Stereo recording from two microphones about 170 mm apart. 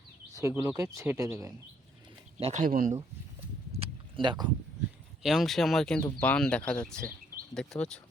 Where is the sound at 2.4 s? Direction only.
45° right (ahead or behind).